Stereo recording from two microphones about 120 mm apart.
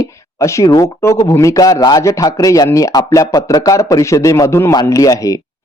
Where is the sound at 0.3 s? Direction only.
25° left (ahead or behind).